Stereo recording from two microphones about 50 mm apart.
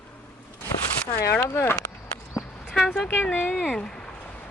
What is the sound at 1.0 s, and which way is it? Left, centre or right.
Speech, left.